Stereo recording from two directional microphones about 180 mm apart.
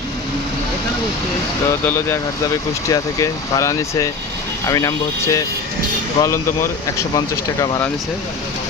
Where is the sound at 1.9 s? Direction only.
15° left (ahead or behind).